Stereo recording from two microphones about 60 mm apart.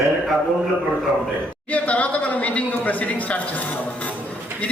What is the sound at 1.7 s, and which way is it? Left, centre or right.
Speech, left.